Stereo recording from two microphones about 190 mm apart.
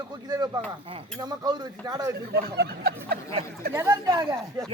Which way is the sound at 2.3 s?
55° right (ahead or behind).